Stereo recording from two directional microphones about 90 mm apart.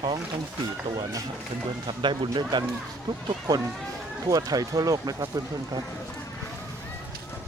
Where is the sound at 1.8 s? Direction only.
70° right (ahead or behind).